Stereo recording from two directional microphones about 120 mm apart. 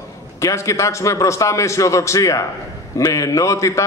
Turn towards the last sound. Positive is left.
turn(degrees=25)  # may be behind; listen again after turning